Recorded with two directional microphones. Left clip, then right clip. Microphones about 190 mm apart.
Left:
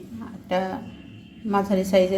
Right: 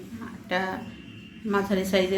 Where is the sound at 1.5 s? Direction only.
45° left (ahead or behind).